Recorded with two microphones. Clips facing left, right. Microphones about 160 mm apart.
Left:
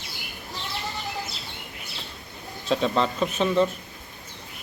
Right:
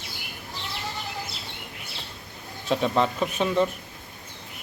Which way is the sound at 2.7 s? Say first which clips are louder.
Even; 10° right (ahead or behind).